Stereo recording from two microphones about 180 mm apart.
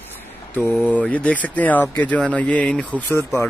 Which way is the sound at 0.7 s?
10° left (ahead or behind).